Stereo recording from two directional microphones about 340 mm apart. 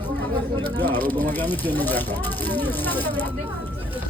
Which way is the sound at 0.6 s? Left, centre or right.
Centre.